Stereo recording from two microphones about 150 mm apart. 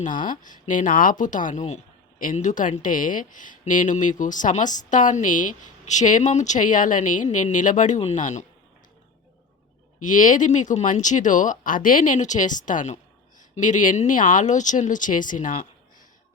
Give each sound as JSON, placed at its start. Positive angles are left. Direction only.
{"t": 0.3, "sound": "a woman's voice", "side_deg": 60}
{"t": 2.1, "sound": "a woman's voice", "side_deg": 60}
{"t": 10.0, "sound": "a woman's voice", "side_deg": 60}